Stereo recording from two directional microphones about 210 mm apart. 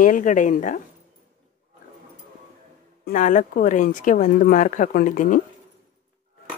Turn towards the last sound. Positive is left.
turn(degrees=40)  # may be behind; listen again after turning